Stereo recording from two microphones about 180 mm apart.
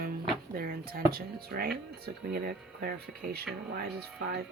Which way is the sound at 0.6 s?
55° right (ahead or behind).